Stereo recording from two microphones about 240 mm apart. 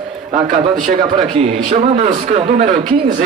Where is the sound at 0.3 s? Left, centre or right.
Right.